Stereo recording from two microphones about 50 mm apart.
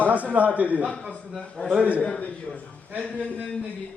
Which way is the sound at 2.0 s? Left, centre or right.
Left.